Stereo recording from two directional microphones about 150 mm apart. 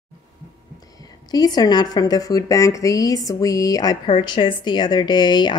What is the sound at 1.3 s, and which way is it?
A woman's voice, 25° left (ahead or behind).